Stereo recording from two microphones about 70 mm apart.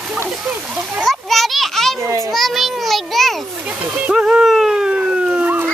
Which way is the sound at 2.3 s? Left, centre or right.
Centre.